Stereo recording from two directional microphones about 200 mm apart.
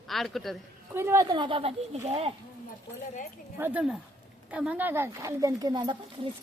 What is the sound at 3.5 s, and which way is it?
Speech, 10° right (ahead or behind).